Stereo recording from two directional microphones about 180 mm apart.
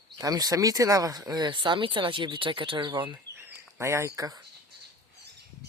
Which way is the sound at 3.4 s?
15° right (ahead or behind).